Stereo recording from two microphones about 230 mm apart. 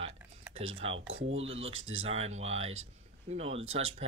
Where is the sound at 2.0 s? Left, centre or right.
Right.